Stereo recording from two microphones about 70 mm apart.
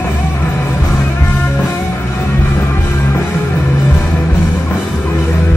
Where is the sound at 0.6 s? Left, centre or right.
Left.